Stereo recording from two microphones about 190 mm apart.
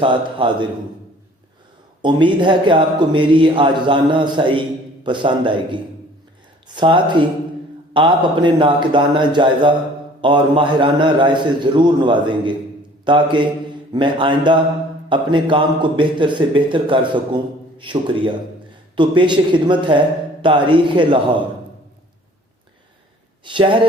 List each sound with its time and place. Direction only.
0.0 s a man's voice: 25° right (ahead or behind)
2.0 s a man's voice: 25° right (ahead or behind)
23.4 s speech: 25° right (ahead or behind)